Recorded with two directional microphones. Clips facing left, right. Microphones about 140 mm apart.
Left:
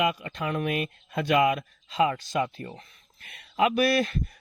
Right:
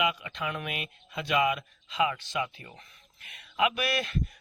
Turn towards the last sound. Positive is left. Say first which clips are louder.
# left 7 dB
turn(degrees=40)  # may be behind; listen again after turning